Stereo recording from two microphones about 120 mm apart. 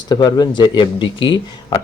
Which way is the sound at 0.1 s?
35° left (ahead or behind).